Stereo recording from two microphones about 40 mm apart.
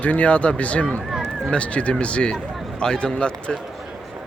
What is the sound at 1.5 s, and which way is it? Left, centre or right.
A man's voice, left.